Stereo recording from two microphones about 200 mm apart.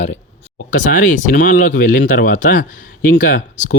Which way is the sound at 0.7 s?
40° left (ahead or behind).